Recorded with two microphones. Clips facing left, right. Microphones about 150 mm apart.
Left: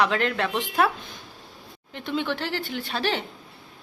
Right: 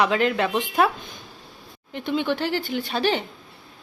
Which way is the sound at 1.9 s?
5° right (ahead or behind).